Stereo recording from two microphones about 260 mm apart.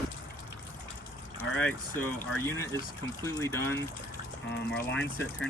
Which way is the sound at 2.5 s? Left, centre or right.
Centre.